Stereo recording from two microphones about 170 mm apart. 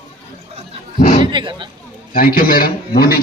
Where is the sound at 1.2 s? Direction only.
30° right (ahead or behind).